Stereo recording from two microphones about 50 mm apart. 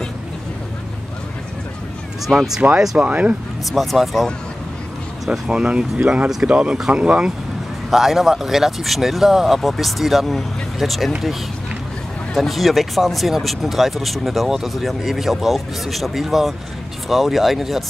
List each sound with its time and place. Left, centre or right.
2.2 s speech: centre
3.0 s speech: right
3.7 s speech: centre
5.5 s speech: right
7.9 s speech: centre
12.4 s speech: centre